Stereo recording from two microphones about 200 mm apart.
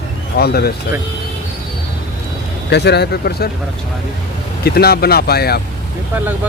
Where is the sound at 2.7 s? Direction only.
55° left (ahead or behind).